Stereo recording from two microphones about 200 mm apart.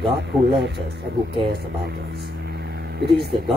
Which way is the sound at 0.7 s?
60° right (ahead or behind).